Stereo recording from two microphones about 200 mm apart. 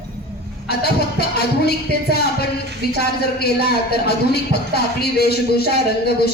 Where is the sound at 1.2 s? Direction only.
50° left (ahead or behind).